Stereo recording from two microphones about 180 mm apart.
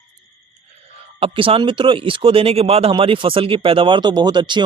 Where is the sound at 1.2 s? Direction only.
30° right (ahead or behind).